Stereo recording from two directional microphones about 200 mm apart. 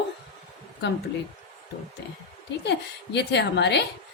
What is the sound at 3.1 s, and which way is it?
Speech, 60° left (ahead or behind).